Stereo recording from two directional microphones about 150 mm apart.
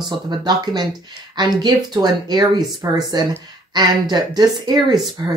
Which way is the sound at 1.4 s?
25° right (ahead or behind).